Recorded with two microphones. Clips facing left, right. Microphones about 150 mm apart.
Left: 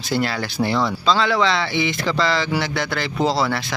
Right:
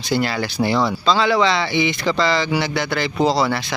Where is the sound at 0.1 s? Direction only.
Centre (ahead or behind).